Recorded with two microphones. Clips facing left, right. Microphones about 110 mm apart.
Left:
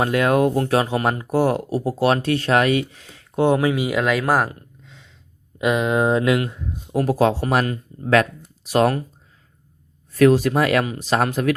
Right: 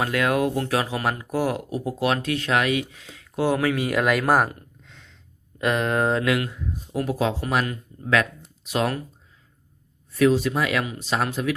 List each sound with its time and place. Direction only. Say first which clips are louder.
0.0 s speech: left 5 dB; 25° left (ahead or behind)
3.8 s speech: left 1 dB; centre (ahead or behind); by 6.7 s 25° left (ahead or behind)
6.9 s speech: left 6 dB; 45° left (ahead or behind)
10.2 s speech: left 5 dB; 50° left (ahead or behind)